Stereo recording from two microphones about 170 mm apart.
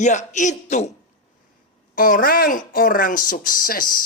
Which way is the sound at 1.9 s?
55° left (ahead or behind).